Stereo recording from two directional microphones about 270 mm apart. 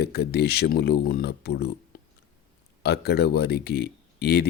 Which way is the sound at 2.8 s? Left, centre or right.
Left.